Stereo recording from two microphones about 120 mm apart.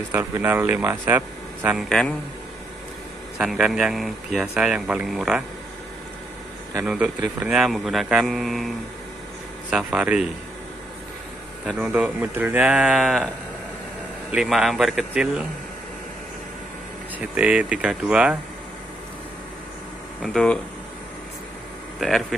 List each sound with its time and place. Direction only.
0.1 s speech: 20° right (ahead or behind)
1.8 s speech: 5° left (ahead or behind)
3.3 s speech: 5° right (ahead or behind)
6.8 s speech: 5° right (ahead or behind)
11.6 s a man's voice: 5° right (ahead or behind)
14.3 s speech: 5° right (ahead or behind)
17.2 s speech: 10° right (ahead or behind)
20.2 s speech: 5° left (ahead or behind)